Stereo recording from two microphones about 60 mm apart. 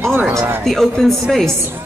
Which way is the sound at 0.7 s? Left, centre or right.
Centre.